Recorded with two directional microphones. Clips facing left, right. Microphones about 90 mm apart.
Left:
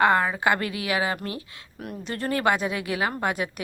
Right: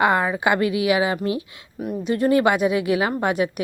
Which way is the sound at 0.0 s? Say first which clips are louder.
Right 2 dB; 15° right (ahead or behind).